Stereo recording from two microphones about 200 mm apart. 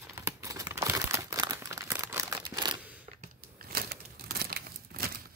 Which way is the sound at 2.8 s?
5° right (ahead or behind).